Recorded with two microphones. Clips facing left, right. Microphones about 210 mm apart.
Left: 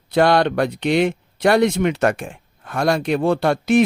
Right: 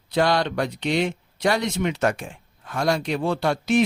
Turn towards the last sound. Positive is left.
turn(degrees=55)  # may be behind; listen again after turning